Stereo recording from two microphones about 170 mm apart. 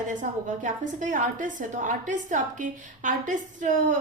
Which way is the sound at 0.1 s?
50° right (ahead or behind).